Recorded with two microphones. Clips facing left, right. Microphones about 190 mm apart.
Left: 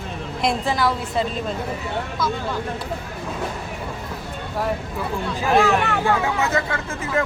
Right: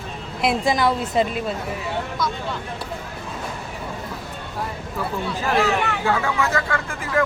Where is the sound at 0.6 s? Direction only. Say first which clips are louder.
Right 2 dB; 20° right (ahead or behind).